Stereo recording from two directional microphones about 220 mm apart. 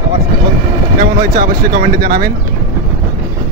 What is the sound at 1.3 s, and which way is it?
Speech, 40° right (ahead or behind).